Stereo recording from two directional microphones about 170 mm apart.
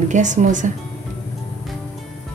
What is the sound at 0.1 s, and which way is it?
Speech, 45° right (ahead or behind).